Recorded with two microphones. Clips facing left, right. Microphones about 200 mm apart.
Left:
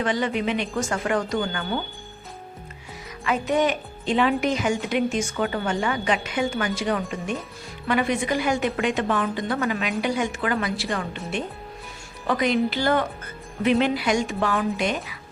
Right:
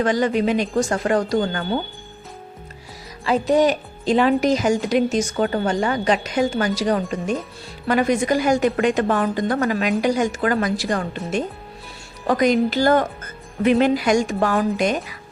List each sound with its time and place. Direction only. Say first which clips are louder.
0.0 s a woman's voice: right 5 dB; 40° right (ahead or behind)
3.2 s a woman's voice: right 5 dB; 35° right (ahead or behind)
12.3 s speech: right 5 dB; 45° right (ahead or behind)